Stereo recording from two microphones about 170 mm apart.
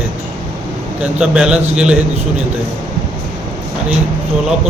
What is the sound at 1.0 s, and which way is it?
Speech, 5° right (ahead or behind).